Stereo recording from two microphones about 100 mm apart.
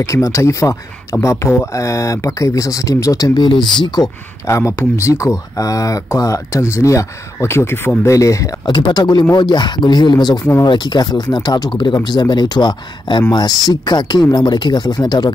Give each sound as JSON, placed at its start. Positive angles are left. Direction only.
{"t": 0.0, "sound": "speech", "side_deg": 30}
{"t": 4.5, "sound": "speech", "side_deg": 25}
{"t": 8.6, "sound": "speech", "side_deg": 50}